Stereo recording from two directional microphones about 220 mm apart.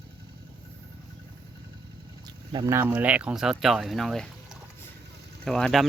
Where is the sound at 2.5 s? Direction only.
15° right (ahead or behind).